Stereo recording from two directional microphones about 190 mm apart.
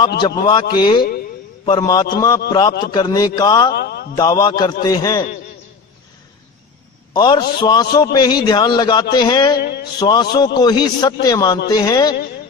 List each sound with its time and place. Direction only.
0.2 s a man's voice: 20° left (ahead or behind)
3.8 s a sound: 55° left (ahead or behind)
4.1 s a man's voice: 20° left (ahead or behind)
7.1 s a man's voice: 20° left (ahead or behind)
9.6 s a man's voice: 60° left (ahead or behind)
10.0 s a man's voice: 20° left (ahead or behind)